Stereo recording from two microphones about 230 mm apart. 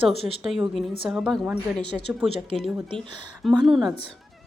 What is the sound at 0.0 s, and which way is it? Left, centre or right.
Speech, right.